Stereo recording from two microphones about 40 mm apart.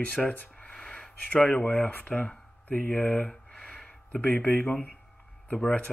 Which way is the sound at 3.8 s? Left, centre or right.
Left.